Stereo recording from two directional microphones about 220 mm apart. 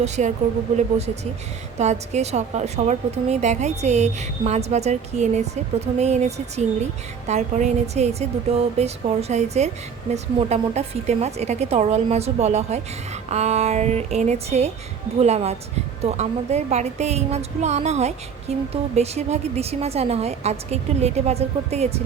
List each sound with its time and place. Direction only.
0.0 s a woman's voice: 30° right (ahead or behind)